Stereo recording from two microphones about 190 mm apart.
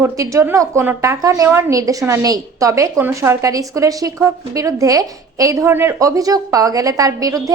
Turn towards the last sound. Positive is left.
turn(degrees=-20)  # may be behind; listen again after turning